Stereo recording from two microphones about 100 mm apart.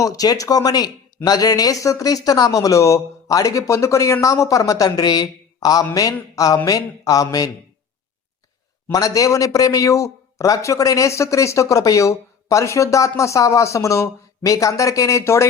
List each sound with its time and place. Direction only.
0.0 s a man's voice: 35° left (ahead or behind)
8.9 s a man's voice: 40° left (ahead or behind)